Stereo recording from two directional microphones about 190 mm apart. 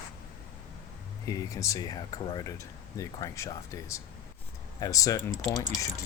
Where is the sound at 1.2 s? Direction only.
15° left (ahead or behind).